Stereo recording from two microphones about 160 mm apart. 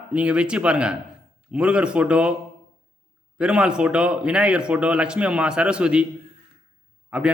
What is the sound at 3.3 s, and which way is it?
A man's voice, 5° right (ahead or behind).